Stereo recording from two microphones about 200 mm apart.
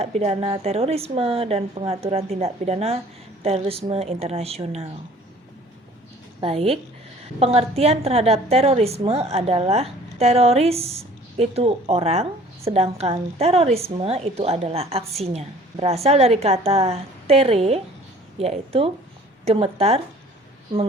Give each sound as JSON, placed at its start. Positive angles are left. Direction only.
{"t": 0.0, "sound": "a woman's voice", "side_deg": -30}
{"t": 6.4, "sound": "a woman's voice", "side_deg": -30}